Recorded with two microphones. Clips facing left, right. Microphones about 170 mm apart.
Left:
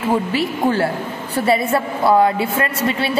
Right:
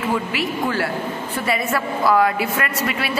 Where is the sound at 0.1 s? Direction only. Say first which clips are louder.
Left 6 dB; 30° left (ahead or behind).